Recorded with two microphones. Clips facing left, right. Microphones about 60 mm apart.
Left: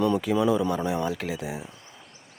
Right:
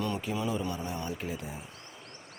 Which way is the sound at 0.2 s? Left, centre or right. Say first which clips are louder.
Left 9 dB; left.